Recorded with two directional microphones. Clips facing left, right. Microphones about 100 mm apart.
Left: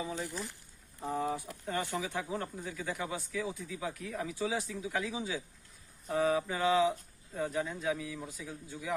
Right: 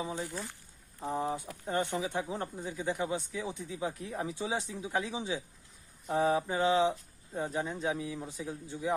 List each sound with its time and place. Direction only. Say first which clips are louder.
1.0 s speech: right 1 dB; 30° right (ahead or behind)